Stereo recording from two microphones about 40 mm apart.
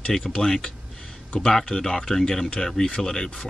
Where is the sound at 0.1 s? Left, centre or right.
Centre.